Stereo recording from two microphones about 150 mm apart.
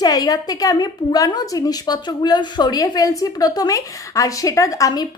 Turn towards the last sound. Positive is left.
turn(degrees=25)  # may be behind; listen again after turning